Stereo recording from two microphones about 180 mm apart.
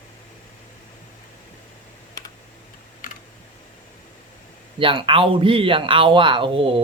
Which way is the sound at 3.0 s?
50° left (ahead or behind).